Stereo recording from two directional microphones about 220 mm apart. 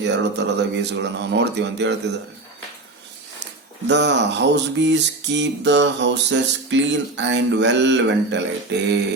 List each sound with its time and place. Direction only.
0.0 s speech: 55° right (ahead or behind)
3.4 s speech: 50° right (ahead or behind)